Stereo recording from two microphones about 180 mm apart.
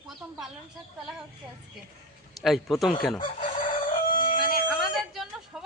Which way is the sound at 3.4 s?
50° left (ahead or behind).